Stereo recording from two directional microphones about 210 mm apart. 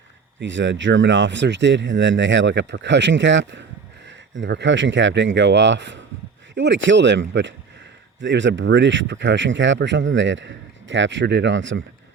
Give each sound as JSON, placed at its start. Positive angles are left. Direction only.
{"t": 0.3, "sound": "speech", "side_deg": -60}